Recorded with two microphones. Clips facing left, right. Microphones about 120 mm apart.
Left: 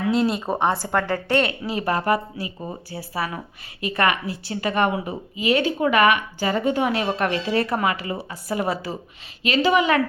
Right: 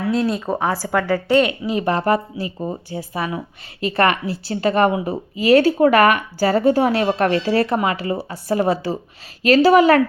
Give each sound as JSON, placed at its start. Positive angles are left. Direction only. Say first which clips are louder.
{"t": 0.2, "sound": "a woman's voice", "louder": "right 1 dB", "side_deg": 5}
{"t": 1.4, "sound": "a woman's voice", "louder": "right 5 dB", "side_deg": -15}
{"t": 9.4, "sound": "a woman's voice", "louder": "right 7 dB", "side_deg": -40}